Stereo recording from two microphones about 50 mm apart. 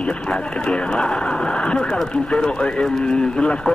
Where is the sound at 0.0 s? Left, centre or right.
Centre.